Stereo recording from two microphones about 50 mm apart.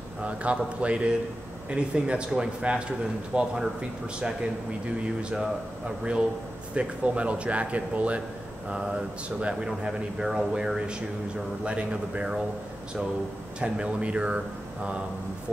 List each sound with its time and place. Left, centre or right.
0.2 s speech: right
5.0 s speech: centre
13.6 s speech: right